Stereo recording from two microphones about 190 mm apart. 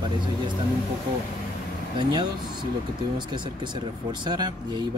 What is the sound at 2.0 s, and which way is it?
Speech, 25° right (ahead or behind).